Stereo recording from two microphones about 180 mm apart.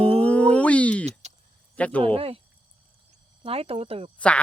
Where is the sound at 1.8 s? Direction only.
5° left (ahead or behind).